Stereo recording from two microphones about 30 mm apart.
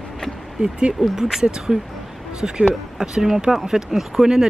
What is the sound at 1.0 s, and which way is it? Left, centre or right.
Speech, right.